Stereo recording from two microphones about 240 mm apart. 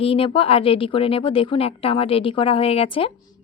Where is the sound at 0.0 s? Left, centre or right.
Left.